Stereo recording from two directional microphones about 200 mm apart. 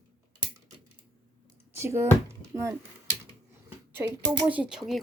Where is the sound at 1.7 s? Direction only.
15° right (ahead or behind).